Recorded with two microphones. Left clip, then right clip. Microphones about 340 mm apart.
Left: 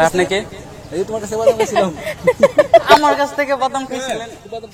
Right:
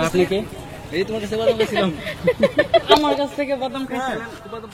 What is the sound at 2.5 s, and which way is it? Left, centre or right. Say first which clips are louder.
Speech: left 6 dB; left.